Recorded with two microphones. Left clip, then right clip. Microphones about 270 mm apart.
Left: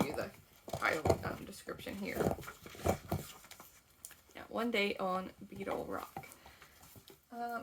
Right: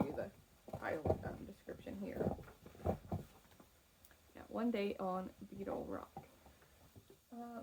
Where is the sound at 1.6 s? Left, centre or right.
Centre.